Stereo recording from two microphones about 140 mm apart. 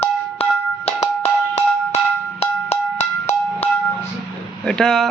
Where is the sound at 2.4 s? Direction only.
50° left (ahead or behind).